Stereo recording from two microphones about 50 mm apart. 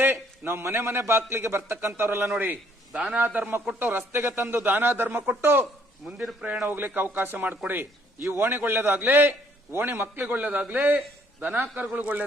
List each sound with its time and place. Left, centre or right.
0.0 s a man's voice: right
2.9 s a man's voice: right
3.2 s a man's voice: right
4.1 s a man's voice: right
4.4 s a man's voice: right
6.0 s a man's voice: centre
6.7 s a man's voice: right
8.9 s a man's voice: right
10.3 s a man's voice: right